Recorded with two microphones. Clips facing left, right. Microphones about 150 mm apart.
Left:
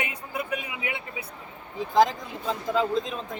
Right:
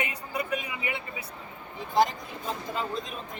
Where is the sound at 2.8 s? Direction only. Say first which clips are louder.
Left 9 dB; 90° left.